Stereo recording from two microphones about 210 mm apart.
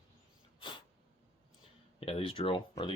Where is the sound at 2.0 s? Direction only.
25° left (ahead or behind).